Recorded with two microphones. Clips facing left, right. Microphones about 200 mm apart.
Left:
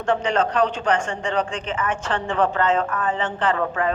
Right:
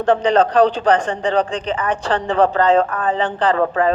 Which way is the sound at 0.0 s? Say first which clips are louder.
Right 6 dB; 35° right (ahead or behind).